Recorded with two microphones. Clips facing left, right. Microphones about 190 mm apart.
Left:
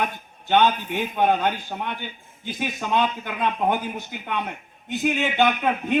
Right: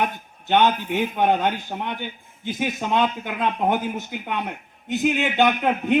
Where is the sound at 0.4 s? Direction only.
15° right (ahead or behind).